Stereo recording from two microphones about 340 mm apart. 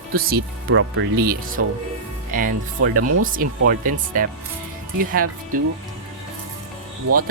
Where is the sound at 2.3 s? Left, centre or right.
Right.